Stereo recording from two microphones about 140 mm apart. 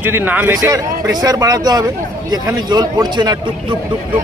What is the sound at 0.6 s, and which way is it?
Speech, 25° right (ahead or behind).